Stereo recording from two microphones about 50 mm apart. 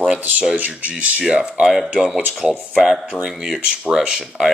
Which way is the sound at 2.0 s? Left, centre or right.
Centre.